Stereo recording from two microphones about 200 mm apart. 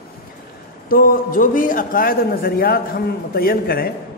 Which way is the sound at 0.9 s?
45° left (ahead or behind).